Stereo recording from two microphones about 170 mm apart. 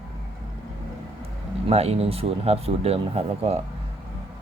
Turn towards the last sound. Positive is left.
turn(degrees=-35)  # may be behind; listen again after turning